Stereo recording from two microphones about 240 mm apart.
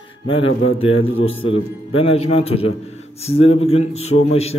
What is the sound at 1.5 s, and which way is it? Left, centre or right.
A man's voice, left.